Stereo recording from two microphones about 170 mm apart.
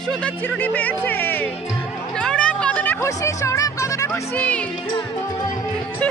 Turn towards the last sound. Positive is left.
turn(degrees=10)  # may be behind; listen again after turning